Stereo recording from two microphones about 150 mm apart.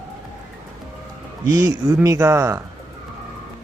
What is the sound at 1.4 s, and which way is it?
Speech, 25° right (ahead or behind).